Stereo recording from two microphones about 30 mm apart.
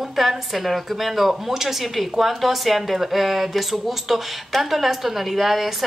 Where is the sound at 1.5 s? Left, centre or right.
Centre.